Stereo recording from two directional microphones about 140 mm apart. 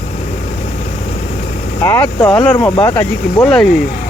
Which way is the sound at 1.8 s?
25° left (ahead or behind).